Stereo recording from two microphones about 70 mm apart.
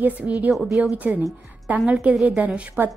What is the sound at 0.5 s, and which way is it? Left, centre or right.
Speech, centre.